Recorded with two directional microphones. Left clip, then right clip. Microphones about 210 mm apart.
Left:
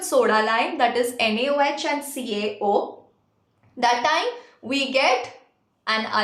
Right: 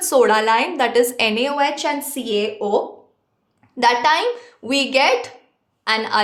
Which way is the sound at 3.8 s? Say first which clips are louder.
Right 5 dB; 50° right (ahead or behind).